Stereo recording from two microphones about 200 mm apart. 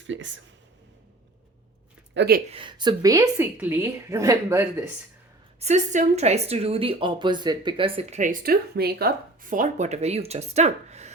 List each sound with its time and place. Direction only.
2.1 s speech: 50° right (ahead or behind)
2.5 s a woman's voice: 25° right (ahead or behind)
5.5 s speech: 35° right (ahead or behind)